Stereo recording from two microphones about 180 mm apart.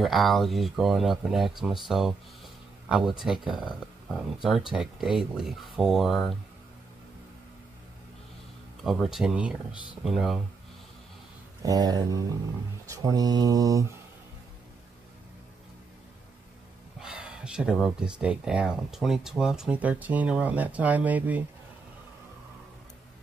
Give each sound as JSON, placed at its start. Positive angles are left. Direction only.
{"t": 0.0, "sound": "speech", "side_deg": 0}
{"t": 8.8, "sound": "speech", "side_deg": 0}
{"t": 11.6, "sound": "speech", "side_deg": -20}
{"t": 17.0, "sound": "speech", "side_deg": -5}